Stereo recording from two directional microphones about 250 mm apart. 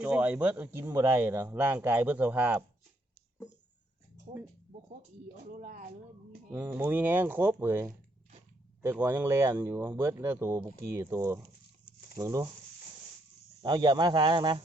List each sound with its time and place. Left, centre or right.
0.0 s speech: centre
5.5 s speech: right
6.5 s speech: centre
13.6 s speech: centre